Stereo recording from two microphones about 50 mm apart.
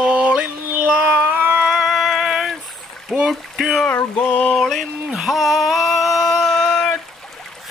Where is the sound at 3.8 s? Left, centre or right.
Left.